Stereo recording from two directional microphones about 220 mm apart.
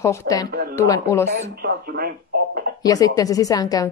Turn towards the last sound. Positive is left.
turn(degrees=15)  # may be behind; listen again after turning